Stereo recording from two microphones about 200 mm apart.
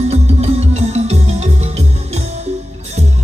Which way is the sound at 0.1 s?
30° right (ahead or behind).